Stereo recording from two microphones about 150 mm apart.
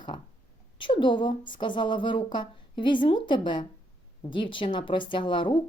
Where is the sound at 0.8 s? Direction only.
30° left (ahead or behind).